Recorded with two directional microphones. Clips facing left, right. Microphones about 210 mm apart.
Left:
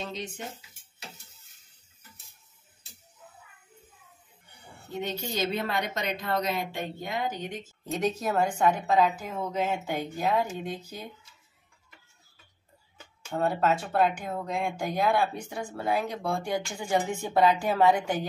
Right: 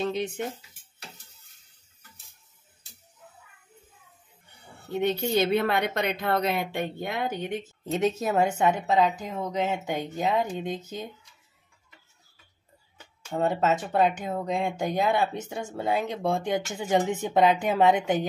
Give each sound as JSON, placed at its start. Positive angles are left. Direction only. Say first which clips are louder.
{"t": 0.0, "sound": "speech", "louder": "right 8 dB", "side_deg": -60}
{"t": 5.0, "sound": "speech", "louder": "right 7 dB", "side_deg": -60}
{"t": 7.8, "sound": "speech", "louder": "right 2 dB", "side_deg": -25}
{"t": 13.3, "sound": "speech", "louder": "right 1 dB", "side_deg": -20}